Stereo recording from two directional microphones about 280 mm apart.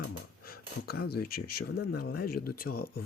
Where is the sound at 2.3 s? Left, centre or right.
Left.